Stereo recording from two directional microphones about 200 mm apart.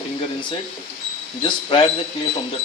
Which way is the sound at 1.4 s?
25° left (ahead or behind).